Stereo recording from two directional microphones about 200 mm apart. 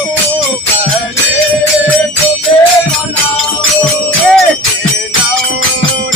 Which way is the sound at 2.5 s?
25° left (ahead or behind).